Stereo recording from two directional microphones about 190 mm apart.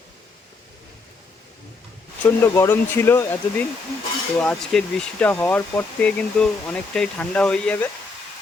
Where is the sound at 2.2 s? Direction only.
15° left (ahead or behind).